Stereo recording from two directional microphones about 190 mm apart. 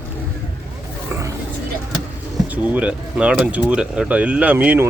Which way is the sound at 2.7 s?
5° right (ahead or behind).